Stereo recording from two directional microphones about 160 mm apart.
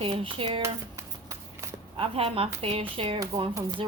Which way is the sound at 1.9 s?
35° right (ahead or behind).